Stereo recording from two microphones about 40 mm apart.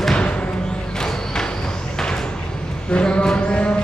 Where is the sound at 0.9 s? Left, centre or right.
Centre.